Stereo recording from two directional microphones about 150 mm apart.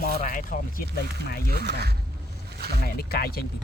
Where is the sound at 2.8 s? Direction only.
90° left.